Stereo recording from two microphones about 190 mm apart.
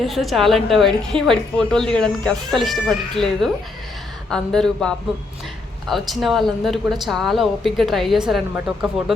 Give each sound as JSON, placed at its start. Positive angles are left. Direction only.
{"t": 0.0, "sound": "a woman's voice", "side_deg": 0}